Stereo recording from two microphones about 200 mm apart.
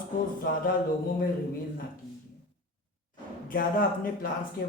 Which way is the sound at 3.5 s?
45° left (ahead or behind).